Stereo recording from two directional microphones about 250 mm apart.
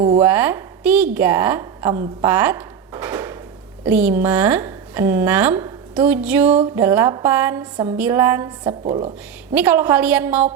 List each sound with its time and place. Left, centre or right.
0.2 s a woman's voice: centre
8.9 s speech: right
9.6 s a woman's voice: centre